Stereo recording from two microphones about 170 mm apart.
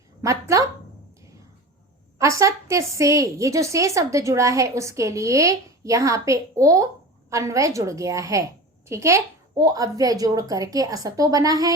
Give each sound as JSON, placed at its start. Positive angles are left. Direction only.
{"t": 0.2, "sound": "speech", "side_deg": -20}
{"t": 2.1, "sound": "a woman's voice", "side_deg": -20}